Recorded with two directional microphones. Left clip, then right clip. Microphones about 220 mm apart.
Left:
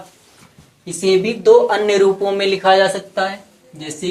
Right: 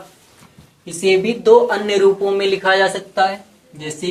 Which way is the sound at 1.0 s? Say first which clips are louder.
Even; 30° left (ahead or behind).